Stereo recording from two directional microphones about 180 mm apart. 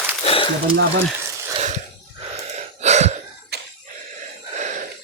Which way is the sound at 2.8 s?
40° right (ahead or behind).